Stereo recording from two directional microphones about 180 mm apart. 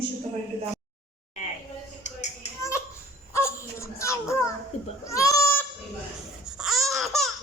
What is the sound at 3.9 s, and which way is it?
Children playing, 15° left (ahead or behind).